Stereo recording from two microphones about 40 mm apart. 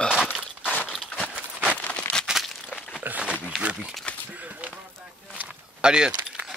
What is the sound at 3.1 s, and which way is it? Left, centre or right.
Speech, right.